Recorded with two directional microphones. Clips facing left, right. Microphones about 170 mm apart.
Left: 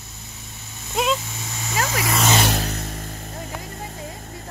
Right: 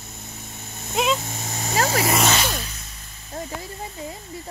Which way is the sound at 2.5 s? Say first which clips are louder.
Left 7 dB; 65° left (ahead or behind).